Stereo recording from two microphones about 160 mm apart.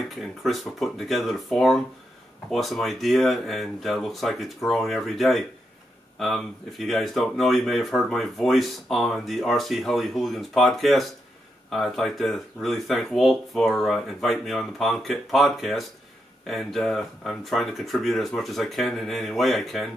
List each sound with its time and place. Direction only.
0.4 s speech: centre (ahead or behind)